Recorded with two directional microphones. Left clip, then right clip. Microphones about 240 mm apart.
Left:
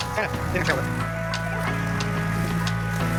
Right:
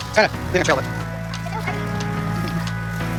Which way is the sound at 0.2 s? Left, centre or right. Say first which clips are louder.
Right 11 dB; centre.